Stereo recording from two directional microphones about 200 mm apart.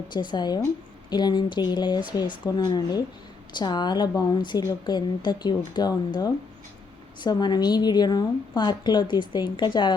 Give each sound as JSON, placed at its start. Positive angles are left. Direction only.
{"t": 0.1, "sound": "a woman's voice", "side_deg": 20}